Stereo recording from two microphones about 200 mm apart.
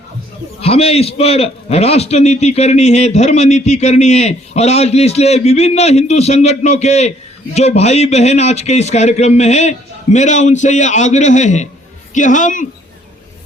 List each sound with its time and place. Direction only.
0.6 s a man's voice: 30° left (ahead or behind)